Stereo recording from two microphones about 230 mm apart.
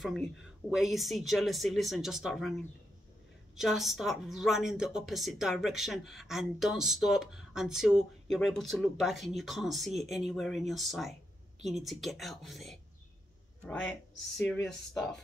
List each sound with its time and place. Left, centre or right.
0.0 s a woman's voice: centre
3.5 s a woman's voice: centre